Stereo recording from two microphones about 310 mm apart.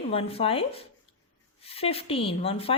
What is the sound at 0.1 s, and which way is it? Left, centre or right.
A woman's voice, centre.